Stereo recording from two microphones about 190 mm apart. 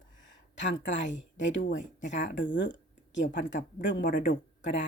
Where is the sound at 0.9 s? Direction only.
75° left (ahead or behind).